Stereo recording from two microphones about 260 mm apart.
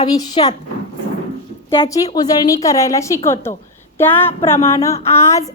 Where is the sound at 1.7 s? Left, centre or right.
Centre.